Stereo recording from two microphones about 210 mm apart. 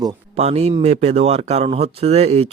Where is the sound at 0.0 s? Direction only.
20° right (ahead or behind).